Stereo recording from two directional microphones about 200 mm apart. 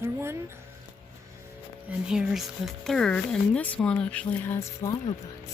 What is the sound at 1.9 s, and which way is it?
Speech, 5° right (ahead or behind).